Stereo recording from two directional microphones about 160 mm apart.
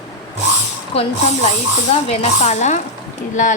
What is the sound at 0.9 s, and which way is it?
Snake, 40° left (ahead or behind).